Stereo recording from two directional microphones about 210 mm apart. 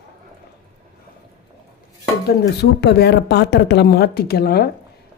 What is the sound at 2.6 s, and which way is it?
A woman's voice, 55° left (ahead or behind).